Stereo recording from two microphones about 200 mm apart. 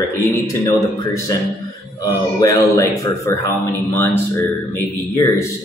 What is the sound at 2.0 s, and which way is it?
Speech, 20° left (ahead or behind).